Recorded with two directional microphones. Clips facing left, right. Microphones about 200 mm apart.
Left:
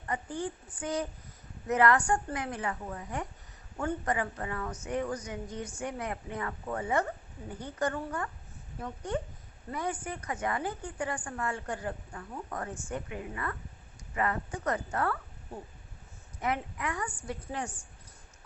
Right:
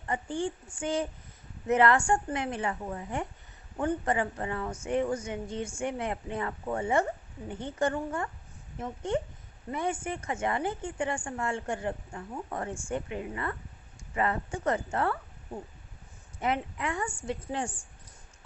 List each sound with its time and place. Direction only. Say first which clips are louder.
0.1 s a woman's voice: right 3 dB; 30° right (ahead or behind)
16.4 s a woman's voice: right 2 dB; 25° right (ahead or behind)